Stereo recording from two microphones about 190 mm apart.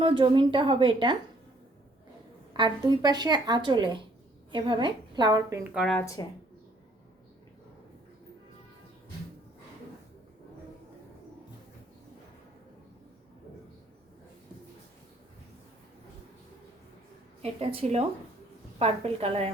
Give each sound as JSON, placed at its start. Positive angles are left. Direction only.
{"t": 0.0, "sound": "a woman's voice", "side_deg": -25}
{"t": 2.5, "sound": "a woman's voice", "side_deg": -20}
{"t": 5.7, "sound": "speech", "side_deg": 0}
{"t": 17.4, "sound": "a woman's voice", "side_deg": -30}